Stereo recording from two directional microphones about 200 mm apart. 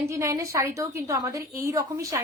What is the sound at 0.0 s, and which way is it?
A woman's voice, 15° right (ahead or behind).